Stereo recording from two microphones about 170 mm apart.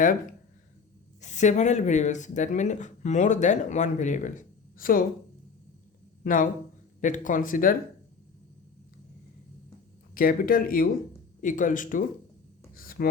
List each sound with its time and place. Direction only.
1.2 s speech: 45° left (ahead or behind)
6.2 s speech: 50° left (ahead or behind)
10.2 s speech: 55° left (ahead or behind)
12.7 s a sound: 60° left (ahead or behind)